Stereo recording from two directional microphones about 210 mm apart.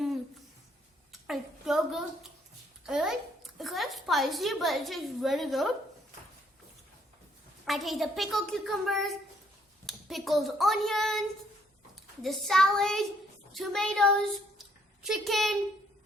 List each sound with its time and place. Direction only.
1.1 s a sound: centre (ahead or behind)
2.8 s a woman's voice: centre (ahead or behind)
7.6 s a woman's voice: centre (ahead or behind)
12.2 s a woman's voice: centre (ahead or behind)